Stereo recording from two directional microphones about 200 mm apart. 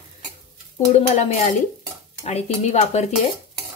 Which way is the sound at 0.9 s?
35° left (ahead or behind).